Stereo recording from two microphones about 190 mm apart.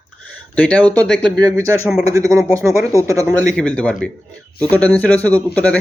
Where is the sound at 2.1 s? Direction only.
15° right (ahead or behind).